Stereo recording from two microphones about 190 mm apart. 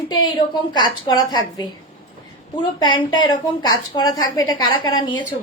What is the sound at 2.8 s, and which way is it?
A woman's voice, 25° left (ahead or behind).